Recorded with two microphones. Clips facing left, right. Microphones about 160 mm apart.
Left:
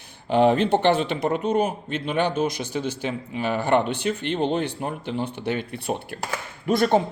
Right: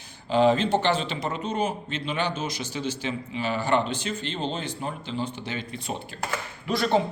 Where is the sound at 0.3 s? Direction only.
60° left (ahead or behind).